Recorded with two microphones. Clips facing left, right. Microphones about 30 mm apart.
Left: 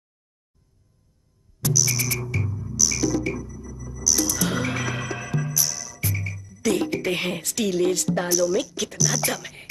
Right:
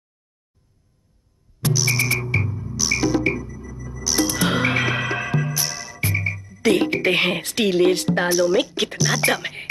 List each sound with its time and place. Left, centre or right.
1.6 s music: right